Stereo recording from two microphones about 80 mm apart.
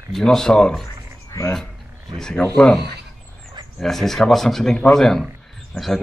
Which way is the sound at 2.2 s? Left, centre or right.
Centre.